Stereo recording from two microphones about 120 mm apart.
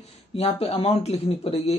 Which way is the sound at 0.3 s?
60° left (ahead or behind).